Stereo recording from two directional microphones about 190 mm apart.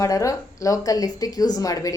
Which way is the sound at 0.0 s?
15° left (ahead or behind).